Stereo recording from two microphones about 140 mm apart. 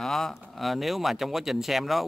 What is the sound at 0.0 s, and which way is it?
Speech, centre (ahead or behind).